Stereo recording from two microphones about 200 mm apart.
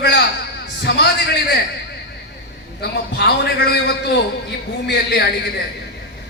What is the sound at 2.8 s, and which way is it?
A man's voice, 55° left (ahead or behind).